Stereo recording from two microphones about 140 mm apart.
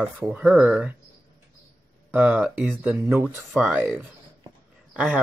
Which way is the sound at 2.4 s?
Centre (ahead or behind).